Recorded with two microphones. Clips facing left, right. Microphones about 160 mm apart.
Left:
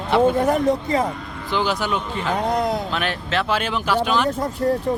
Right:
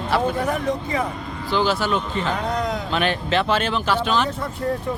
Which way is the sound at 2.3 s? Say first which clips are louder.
Left 3 dB; 35° left (ahead or behind).